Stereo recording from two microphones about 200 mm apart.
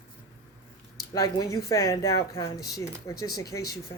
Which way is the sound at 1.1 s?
15° left (ahead or behind).